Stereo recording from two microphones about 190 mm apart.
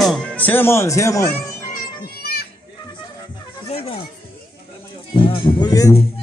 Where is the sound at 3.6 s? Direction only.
30° left (ahead or behind).